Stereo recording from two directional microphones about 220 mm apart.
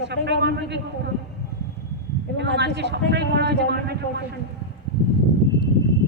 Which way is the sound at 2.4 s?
50° right (ahead or behind).